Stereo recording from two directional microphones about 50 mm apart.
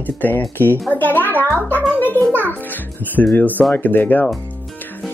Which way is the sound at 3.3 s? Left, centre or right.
Left.